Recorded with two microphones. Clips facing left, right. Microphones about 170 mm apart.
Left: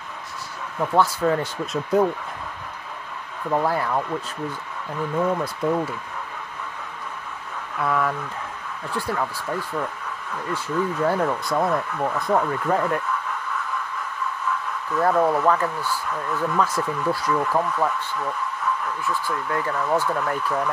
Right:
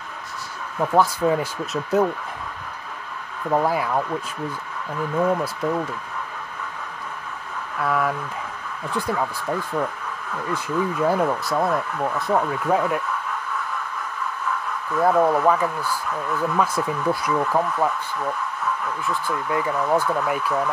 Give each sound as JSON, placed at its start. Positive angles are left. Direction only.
{"t": 0.7, "sound": "speech", "side_deg": -10}
{"t": 3.4, "sound": "speech", "side_deg": -15}
{"t": 5.1, "sound": "speech", "side_deg": -5}
{"t": 7.8, "sound": "speech", "side_deg": -5}
{"t": 8.9, "sound": "speech", "side_deg": -15}
{"t": 10.5, "sound": "speech", "side_deg": -15}
{"t": 15.0, "sound": "speech", "side_deg": -10}
{"t": 19.2, "sound": "speech", "side_deg": -15}